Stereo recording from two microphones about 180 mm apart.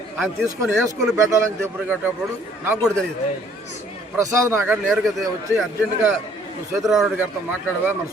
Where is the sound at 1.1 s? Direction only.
15° right (ahead or behind).